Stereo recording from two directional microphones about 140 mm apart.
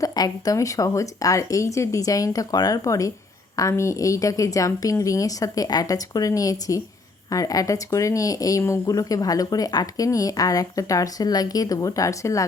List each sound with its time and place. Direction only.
0.0 s speech: 25° left (ahead or behind)